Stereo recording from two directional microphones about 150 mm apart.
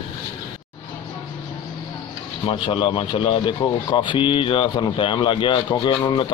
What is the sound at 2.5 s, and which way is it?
Speech, 35° left (ahead or behind).